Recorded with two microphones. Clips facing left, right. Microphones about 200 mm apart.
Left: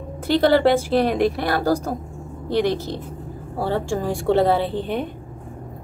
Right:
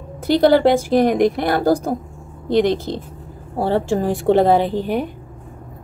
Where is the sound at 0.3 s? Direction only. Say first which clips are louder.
Right 3 dB; 15° right (ahead or behind).